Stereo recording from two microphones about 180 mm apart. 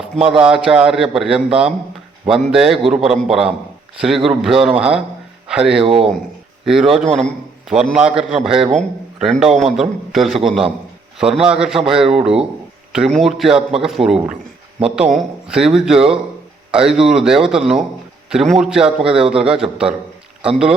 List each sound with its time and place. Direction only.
0.2 s a man's voice: 5° right (ahead or behind)
5.8 s speech: 30° right (ahead or behind)
7.2 s a man's voice: centre (ahead or behind)